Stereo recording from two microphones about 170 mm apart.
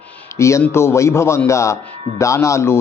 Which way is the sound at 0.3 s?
15° left (ahead or behind).